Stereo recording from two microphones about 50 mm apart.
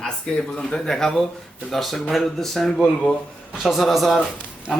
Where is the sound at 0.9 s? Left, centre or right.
Centre.